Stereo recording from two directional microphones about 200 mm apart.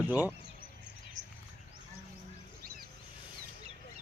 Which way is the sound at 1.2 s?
70° right (ahead or behind).